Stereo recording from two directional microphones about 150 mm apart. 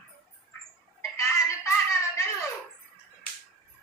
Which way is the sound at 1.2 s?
20° left (ahead or behind).